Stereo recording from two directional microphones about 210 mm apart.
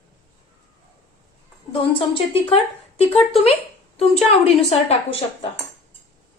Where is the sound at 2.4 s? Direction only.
30° left (ahead or behind).